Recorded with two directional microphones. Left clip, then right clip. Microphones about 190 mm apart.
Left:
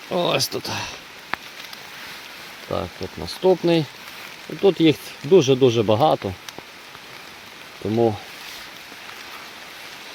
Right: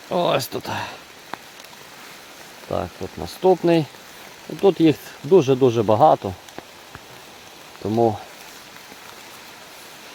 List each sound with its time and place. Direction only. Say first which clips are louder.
0.1 s speech: right 1 dB; 5° right (ahead or behind)
1.3 s a sound: left 6 dB; 30° left (ahead or behind)
2.6 s speech: right 1 dB; 5° right (ahead or behind)
7.9 s speech: right 1 dB; centre (ahead or behind)